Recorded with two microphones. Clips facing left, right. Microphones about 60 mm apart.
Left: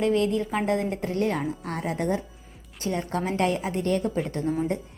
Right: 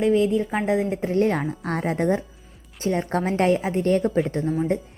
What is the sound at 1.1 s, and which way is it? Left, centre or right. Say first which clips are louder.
Speech: right 6 dB; right.